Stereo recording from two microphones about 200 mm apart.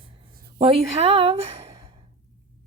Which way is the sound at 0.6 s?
30° right (ahead or behind).